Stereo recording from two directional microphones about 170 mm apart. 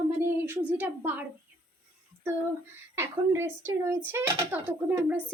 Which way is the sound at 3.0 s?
15° right (ahead or behind).